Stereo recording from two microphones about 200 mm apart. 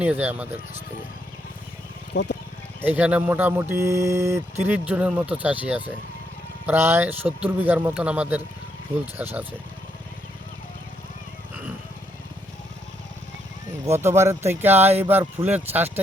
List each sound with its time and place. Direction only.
0.0 s speech: 10° right (ahead or behind)
2.1 s speech: 60° left (ahead or behind)
2.8 s speech: 10° right (ahead or behind)
14.2 s speech: 15° right (ahead or behind)